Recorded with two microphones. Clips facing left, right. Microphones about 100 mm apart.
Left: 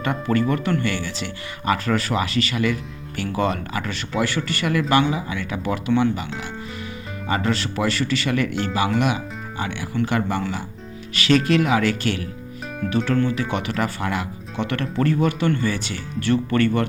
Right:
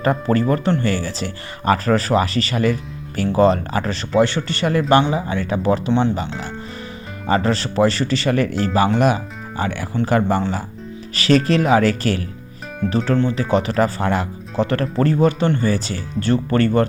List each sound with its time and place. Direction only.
0.0 s speech: 35° right (ahead or behind)
7.3 s speech: 35° right (ahead or behind)